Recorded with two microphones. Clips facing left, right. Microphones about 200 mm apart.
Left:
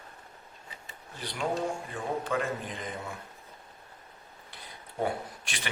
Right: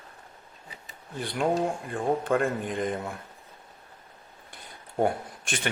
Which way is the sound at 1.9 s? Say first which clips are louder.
Right 8 dB; 50° right (ahead or behind).